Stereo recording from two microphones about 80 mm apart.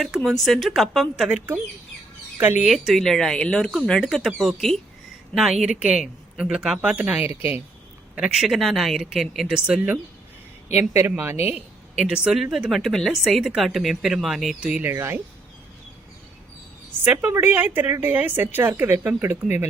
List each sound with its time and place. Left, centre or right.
0.0 s speech: centre
2.4 s speech: right
2.7 s speech: centre
8.1 s speech: centre
9.6 s speech: centre
10.8 s speech: right
11.9 s speech: centre
14.8 s speech: right
17.0 s a woman's voice: right